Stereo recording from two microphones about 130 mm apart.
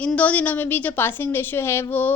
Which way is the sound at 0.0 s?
10° left (ahead or behind).